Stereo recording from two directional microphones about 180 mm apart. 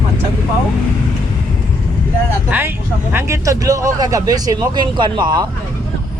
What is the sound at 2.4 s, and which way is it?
Speech, 10° right (ahead or behind).